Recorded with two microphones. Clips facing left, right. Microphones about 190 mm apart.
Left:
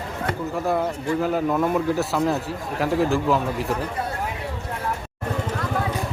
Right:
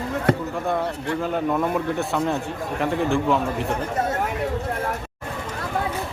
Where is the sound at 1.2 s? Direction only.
5° left (ahead or behind).